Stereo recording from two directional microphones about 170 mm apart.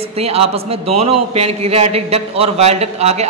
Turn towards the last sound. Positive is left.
turn(degrees=-40)  # may be behind; listen again after turning